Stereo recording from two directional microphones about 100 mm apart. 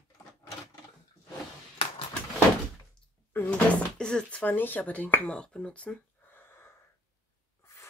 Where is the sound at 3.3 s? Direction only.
20° left (ahead or behind).